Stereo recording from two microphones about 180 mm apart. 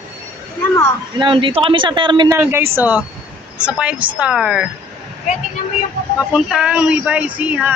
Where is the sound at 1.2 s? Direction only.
25° right (ahead or behind).